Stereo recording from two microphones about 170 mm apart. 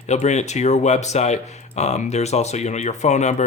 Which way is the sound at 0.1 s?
40° left (ahead or behind).